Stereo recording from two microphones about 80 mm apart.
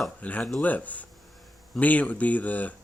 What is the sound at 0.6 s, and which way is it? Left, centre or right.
Speech, centre.